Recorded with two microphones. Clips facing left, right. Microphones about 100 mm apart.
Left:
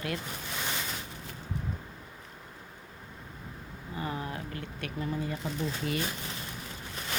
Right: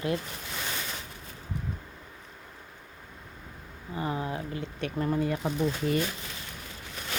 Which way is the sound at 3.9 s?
25° right (ahead or behind).